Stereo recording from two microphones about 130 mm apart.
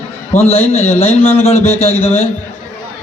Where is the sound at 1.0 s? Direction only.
50° left (ahead or behind).